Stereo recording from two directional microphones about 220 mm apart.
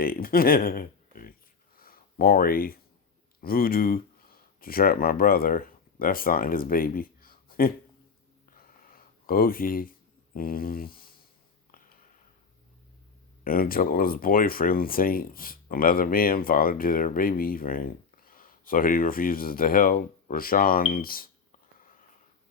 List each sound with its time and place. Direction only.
0.0 s speech: 40° left (ahead or behind)
1.7 s a sound: 40° left (ahead or behind)
3.4 s speech: 40° left (ahead or behind)
8.5 s a sound: 40° left (ahead or behind)
10.3 s speech: 40° left (ahead or behind)
13.4 s speech: 40° left (ahead or behind)